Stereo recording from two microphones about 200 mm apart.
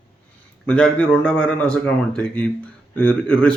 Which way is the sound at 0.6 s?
5° left (ahead or behind).